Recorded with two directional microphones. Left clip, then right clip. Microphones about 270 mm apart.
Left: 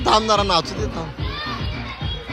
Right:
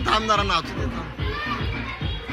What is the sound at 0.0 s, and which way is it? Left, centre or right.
Speech, centre.